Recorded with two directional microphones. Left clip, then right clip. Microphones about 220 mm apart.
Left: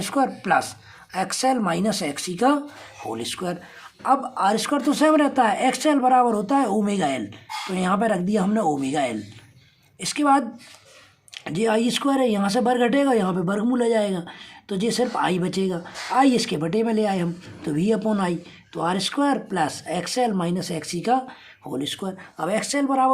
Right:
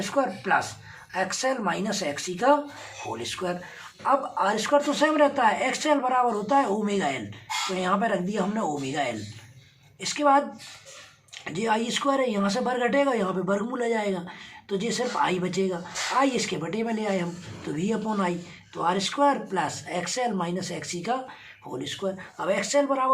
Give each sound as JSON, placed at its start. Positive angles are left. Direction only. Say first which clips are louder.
{"t": 0.0, "sound": "speech", "louder": "left 3 dB", "side_deg": 55}